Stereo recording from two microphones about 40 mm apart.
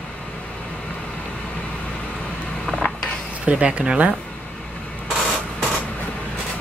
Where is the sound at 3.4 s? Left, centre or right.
Right.